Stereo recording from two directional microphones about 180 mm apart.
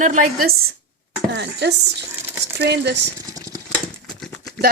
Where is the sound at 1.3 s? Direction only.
70° right (ahead or behind).